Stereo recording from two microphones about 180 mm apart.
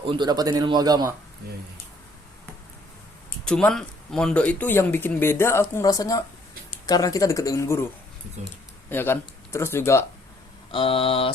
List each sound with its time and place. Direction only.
0.0 s a man's voice: 25° right (ahead or behind)
3.4 s speech: 5° left (ahead or behind)
8.9 s speech: 10° left (ahead or behind)
10.7 s speech: 30° left (ahead or behind)